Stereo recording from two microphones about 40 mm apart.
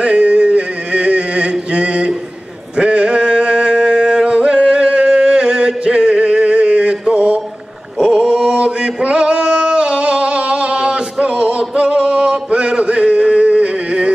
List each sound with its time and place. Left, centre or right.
0.0 s chant: right
2.8 s a sound: right
8.0 s chant: centre
12.4 s music: right